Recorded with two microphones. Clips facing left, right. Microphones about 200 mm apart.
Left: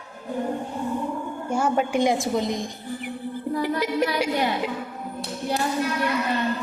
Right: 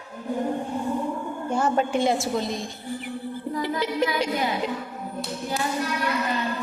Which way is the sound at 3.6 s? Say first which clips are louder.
Even; 10° left (ahead or behind).